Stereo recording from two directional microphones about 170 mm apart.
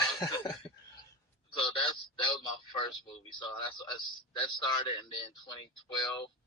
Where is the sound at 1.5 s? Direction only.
30° left (ahead or behind).